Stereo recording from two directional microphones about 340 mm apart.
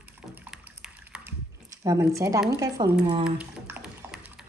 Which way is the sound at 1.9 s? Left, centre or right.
Centre.